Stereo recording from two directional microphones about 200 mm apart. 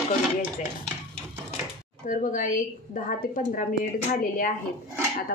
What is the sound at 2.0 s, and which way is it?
A woman's voice, 40° left (ahead or behind).